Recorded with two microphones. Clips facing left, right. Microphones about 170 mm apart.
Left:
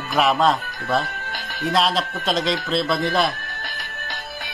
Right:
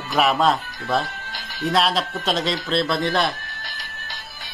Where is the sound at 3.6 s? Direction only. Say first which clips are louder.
Left 4 dB; 55° left (ahead or behind).